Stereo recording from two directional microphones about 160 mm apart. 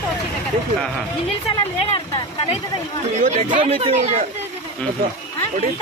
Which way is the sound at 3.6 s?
35° right (ahead or behind).